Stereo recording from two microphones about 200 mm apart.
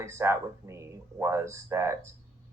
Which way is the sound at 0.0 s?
15° right (ahead or behind).